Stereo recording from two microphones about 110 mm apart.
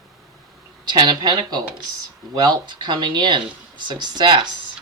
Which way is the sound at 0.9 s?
40° right (ahead or behind).